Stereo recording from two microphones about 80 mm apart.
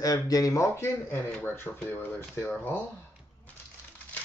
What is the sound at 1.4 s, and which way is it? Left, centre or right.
Speech, left.